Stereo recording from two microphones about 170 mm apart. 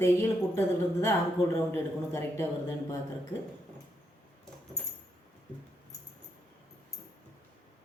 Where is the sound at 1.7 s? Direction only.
15° left (ahead or behind).